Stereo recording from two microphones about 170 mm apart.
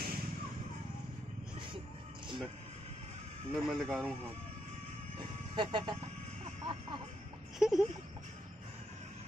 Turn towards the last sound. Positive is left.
turn(degrees=-5)  # may be behind; listen again after turning